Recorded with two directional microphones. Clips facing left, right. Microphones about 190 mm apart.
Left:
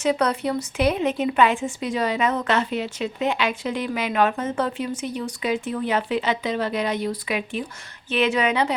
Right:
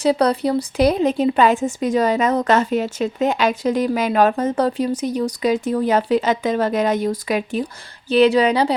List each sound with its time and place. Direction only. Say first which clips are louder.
0.0 s speech: right 5 dB; 35° right (ahead or behind)